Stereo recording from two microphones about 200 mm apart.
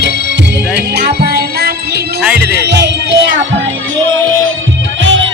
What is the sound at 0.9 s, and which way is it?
Music, 50° right (ahead or behind).